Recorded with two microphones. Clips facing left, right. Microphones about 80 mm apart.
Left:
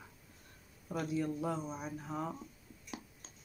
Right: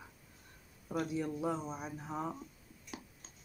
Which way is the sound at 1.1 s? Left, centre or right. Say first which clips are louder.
Left 3 dB; centre.